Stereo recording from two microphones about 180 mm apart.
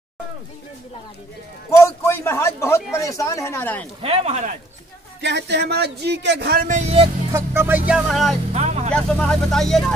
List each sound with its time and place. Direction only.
1.8 s a man's voice: 15° left (ahead or behind)
4.0 s speech: 35° right (ahead or behind)
5.2 s speech: 70° right (ahead or behind)
6.6 s speech: 40° right (ahead or behind)
7.3 s speech: 10° right (ahead or behind)
8.5 s speech: 35° right (ahead or behind)
8.9 s speech: centre (ahead or behind)